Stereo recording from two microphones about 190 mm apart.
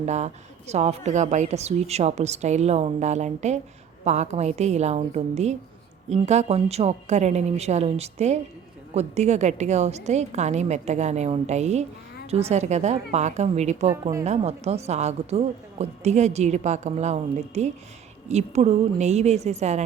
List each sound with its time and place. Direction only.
0.0 s a woman's voice: 35° right (ahead or behind)
13.9 s a woman's voice: 15° right (ahead or behind)
14.3 s a woman's voice: 35° right (ahead or behind)